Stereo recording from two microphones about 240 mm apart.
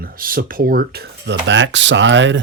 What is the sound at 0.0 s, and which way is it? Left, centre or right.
Speech, right.